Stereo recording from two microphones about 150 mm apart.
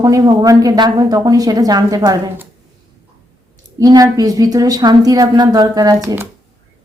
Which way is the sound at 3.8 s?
25° right (ahead or behind).